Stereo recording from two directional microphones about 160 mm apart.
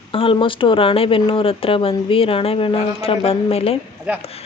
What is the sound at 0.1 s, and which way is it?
Speech, 35° left (ahead or behind).